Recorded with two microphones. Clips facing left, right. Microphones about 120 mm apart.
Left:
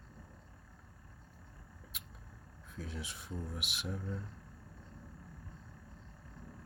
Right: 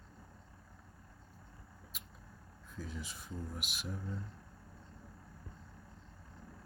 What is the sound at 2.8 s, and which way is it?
Speech, 65° left (ahead or behind).